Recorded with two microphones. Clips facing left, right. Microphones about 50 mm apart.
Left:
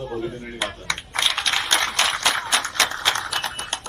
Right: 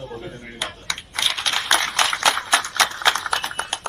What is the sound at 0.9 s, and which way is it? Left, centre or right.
Typing, left.